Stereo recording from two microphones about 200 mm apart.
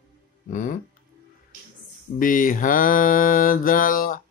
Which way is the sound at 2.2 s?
45° left (ahead or behind).